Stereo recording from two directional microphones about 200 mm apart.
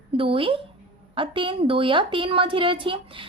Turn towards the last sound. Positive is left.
turn(degrees=-25)  # may be behind; listen again after turning